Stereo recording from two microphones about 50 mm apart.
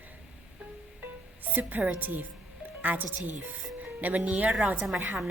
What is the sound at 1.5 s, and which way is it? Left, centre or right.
A woman's voice, right.